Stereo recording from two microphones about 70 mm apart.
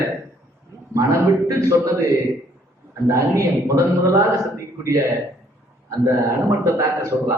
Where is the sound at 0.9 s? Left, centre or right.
Right.